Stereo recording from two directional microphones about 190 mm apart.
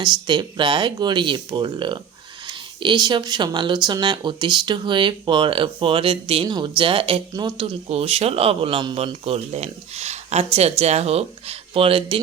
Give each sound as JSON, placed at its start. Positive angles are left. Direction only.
{"t": 0.0, "sound": "speech", "side_deg": -25}